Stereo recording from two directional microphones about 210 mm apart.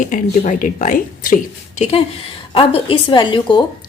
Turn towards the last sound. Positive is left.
turn(degrees=20)  # may be behind; listen again after turning